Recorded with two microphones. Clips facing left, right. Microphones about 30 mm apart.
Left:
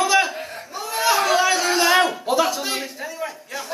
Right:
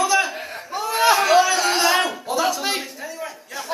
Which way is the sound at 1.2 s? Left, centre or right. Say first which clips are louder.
Right 3 dB; centre.